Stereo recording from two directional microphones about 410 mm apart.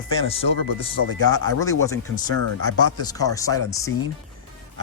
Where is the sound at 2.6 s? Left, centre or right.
Left.